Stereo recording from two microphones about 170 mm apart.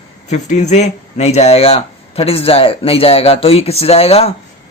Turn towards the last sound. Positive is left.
turn(degrees=35)  # may be behind; listen again after turning